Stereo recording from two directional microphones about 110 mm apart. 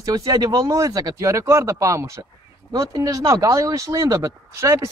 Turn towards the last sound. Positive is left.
turn(degrees=-25)  # may be behind; listen again after turning